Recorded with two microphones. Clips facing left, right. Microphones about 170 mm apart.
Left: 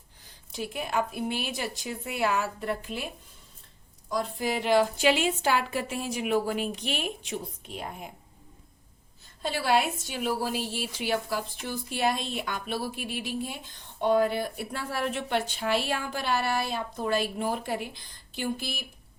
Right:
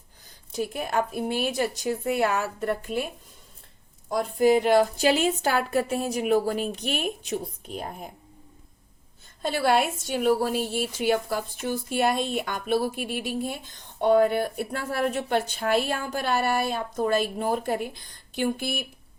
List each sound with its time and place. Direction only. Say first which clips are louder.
0.5 s a woman's voice: right 3 dB; 45° right (ahead or behind)
4.1 s a woman's voice: right 9 dB; 45° right (ahead or behind)
9.4 s a woman's voice: right 3 dB; 50° right (ahead or behind)